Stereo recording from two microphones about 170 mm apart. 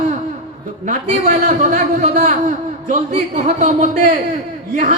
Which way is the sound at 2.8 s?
45° right (ahead or behind).